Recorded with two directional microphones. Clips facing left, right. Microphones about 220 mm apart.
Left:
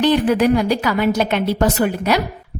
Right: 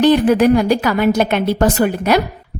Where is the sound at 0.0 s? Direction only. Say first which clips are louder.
Right 4 dB; 45° right (ahead or behind).